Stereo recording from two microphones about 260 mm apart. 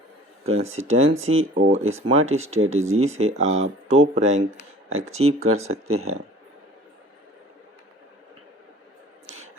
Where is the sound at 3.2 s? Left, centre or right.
Right.